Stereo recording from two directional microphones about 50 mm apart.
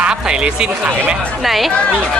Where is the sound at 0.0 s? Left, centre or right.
Right.